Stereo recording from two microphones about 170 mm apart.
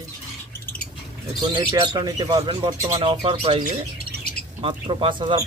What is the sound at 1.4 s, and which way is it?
Speech, 25° right (ahead or behind).